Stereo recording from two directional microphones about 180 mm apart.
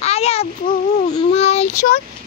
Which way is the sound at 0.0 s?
35° left (ahead or behind).